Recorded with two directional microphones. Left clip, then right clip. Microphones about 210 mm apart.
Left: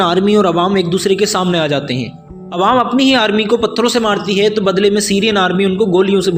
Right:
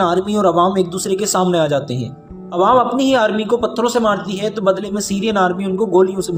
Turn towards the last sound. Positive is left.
turn(degrees=15)  # may be behind; listen again after turning